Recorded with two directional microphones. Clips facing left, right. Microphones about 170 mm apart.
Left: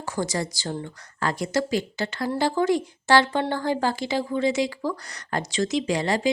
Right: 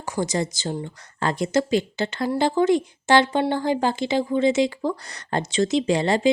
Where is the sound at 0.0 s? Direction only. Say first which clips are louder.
Right 3 dB; 15° right (ahead or behind).